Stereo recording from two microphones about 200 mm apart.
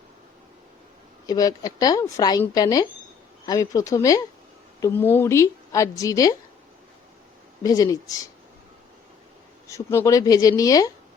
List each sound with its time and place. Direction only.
1.3 s a woman's voice: 20° left (ahead or behind)
7.6 s a woman's voice: 15° left (ahead or behind)
9.6 s a woman's voice: 15° left (ahead or behind)